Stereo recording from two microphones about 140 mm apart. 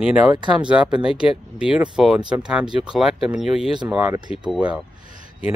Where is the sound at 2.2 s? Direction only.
30° right (ahead or behind).